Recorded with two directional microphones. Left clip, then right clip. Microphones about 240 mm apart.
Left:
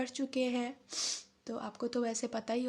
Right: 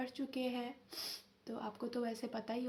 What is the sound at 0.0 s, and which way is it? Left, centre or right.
Speech, left.